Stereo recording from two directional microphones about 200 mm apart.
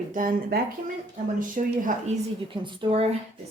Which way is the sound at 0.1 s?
45° right (ahead or behind).